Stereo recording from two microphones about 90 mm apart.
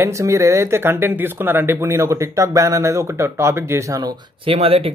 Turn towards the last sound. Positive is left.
turn(degrees=-90)